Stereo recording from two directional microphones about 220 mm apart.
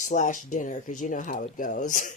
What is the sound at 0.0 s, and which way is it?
Speech, 35° left (ahead or behind).